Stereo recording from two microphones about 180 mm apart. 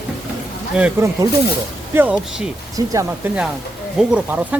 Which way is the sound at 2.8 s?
20° right (ahead or behind).